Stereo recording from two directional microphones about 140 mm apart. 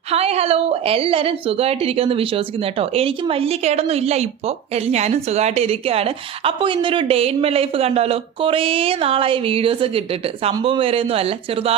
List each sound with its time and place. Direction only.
0.1 s a woman's voice: 45° right (ahead or behind)